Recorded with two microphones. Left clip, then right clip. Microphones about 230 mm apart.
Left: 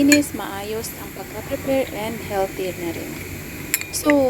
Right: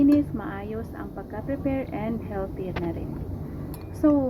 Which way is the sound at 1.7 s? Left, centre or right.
Left.